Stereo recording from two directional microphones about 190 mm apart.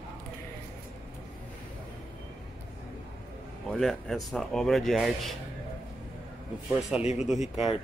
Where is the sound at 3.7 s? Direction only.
Centre (ahead or behind).